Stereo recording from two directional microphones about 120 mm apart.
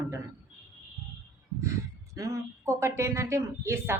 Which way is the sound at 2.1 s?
25° right (ahead or behind).